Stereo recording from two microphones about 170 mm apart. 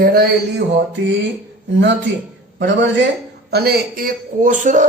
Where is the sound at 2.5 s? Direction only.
90° right.